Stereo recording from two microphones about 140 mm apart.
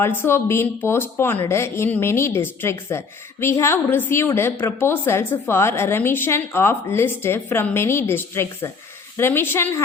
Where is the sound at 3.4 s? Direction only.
20° left (ahead or behind).